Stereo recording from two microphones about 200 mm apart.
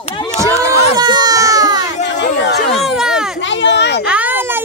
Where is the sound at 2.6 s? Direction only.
5° right (ahead or behind).